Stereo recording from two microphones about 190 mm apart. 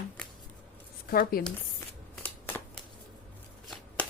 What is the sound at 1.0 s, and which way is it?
Speech, 50° left (ahead or behind).